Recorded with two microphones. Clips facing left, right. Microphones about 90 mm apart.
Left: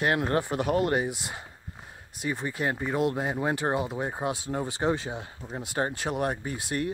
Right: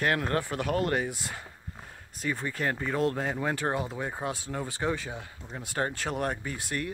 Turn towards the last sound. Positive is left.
turn(degrees=25)  # may be behind; listen again after turning